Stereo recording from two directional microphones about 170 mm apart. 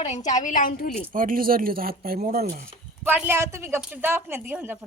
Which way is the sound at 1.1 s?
55° right (ahead or behind).